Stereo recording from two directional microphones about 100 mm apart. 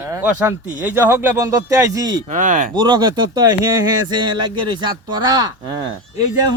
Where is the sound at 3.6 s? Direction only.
35° right (ahead or behind).